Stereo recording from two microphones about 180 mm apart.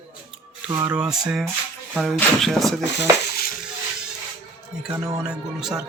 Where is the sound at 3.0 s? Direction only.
60° left (ahead or behind).